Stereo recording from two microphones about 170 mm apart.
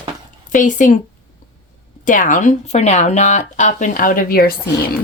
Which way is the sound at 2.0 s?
50° left (ahead or behind).